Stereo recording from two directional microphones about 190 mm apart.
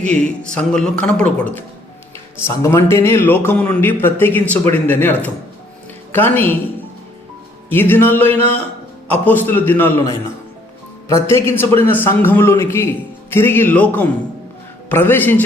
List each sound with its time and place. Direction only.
0.0 s a man's voice: 5° left (ahead or behind)
7.7 s a man's voice: 10° left (ahead or behind)